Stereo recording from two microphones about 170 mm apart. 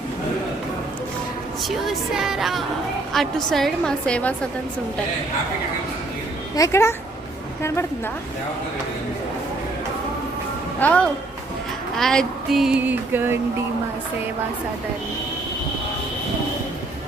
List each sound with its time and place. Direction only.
1.6 s child singing: centre (ahead or behind)
6.6 s speech: 15° left (ahead or behind)
10.8 s speech: 10° left (ahead or behind)
11.9 s child singing: centre (ahead or behind)